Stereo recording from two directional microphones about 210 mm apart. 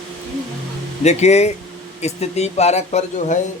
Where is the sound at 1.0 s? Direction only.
30° left (ahead or behind).